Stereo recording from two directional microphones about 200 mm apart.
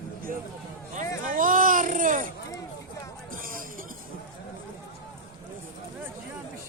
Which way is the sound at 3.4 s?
45° right (ahead or behind).